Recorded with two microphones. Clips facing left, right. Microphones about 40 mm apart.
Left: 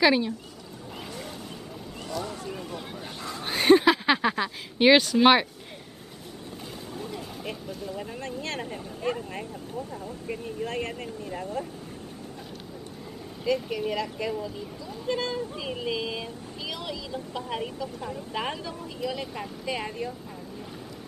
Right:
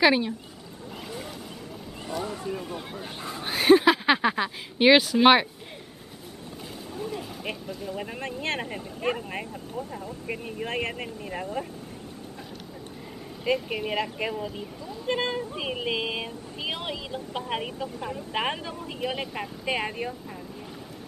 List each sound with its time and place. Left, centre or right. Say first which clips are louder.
0.0 s speech: right 1 dB; centre
2.2 s a sound: right 3 dB; right
2.5 s speech: right 2 dB; centre
3.2 s speech: left 1 dB; centre
3.4 s speech: right 1 dB; centre
7.4 s speech: right 1 dB; right
13.4 s speech: even; right